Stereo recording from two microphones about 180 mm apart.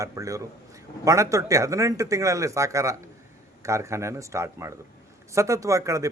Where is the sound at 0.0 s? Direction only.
15° right (ahead or behind).